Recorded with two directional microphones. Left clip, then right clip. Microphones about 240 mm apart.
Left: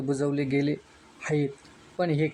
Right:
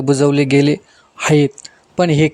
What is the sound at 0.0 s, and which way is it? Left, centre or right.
Speech, right.